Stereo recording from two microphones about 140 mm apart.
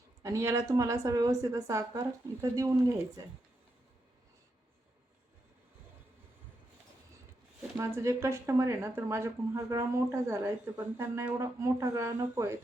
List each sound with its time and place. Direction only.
0.2 s speech: 20° right (ahead or behind)
7.8 s speech: 20° right (ahead or behind)